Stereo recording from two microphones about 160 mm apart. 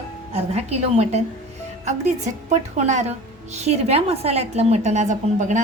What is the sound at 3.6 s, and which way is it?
A woman's voice, 40° right (ahead or behind).